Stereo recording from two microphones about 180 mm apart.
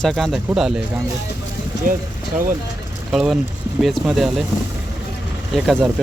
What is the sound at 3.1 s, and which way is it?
Speech, centre (ahead or behind).